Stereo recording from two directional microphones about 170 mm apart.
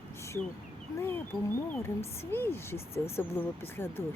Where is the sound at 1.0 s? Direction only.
15° left (ahead or behind).